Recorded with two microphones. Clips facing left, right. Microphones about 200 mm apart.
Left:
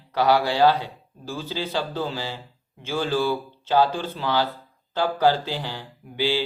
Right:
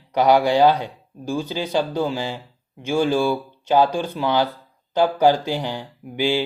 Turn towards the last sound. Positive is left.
turn(degrees=-15)  # may be behind; listen again after turning